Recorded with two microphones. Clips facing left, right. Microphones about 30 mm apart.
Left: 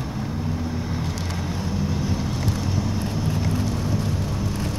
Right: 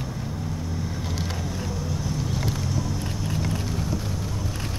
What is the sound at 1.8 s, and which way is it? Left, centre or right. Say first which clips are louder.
Vehicle: left 5 dB; left.